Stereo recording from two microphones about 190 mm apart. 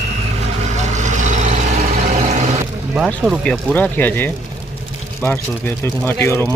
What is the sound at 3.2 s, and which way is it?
Speech, 5° right (ahead or behind).